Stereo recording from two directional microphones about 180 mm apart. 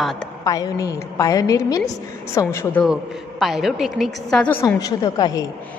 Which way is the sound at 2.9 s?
Centre (ahead or behind).